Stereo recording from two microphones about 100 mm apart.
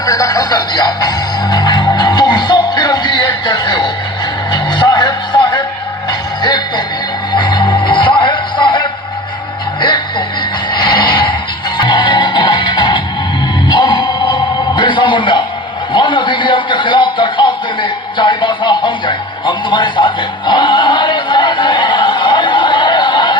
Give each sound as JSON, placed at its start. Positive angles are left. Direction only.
{"t": 0.0, "sound": "music", "side_deg": 35}
{"t": 9.8, "sound": "a sound", "side_deg": 50}
{"t": 11.8, "sound": "music", "side_deg": 50}